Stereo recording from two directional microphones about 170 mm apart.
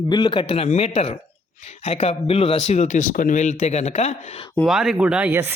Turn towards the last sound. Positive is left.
turn(degrees=-10)  # may be behind; listen again after turning